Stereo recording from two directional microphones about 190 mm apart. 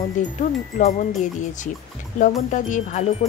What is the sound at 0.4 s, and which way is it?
A woman's voice, 45° left (ahead or behind).